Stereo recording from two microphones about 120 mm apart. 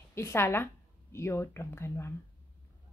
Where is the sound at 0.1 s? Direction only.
20° left (ahead or behind).